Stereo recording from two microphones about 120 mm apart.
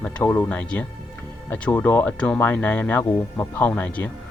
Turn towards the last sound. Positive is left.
turn(degrees=15)  # may be behind; listen again after turning